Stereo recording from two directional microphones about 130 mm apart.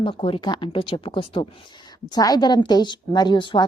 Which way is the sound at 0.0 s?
45° left (ahead or behind).